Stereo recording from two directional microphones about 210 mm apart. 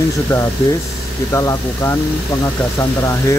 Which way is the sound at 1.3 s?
15° left (ahead or behind).